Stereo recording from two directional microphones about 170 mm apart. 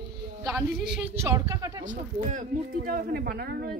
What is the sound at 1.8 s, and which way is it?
Speech, 45° right (ahead or behind).